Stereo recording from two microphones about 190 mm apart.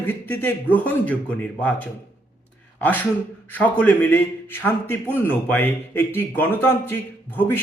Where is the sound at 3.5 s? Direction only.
10° left (ahead or behind).